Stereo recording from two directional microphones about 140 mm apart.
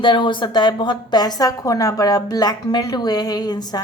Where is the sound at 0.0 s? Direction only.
35° left (ahead or behind).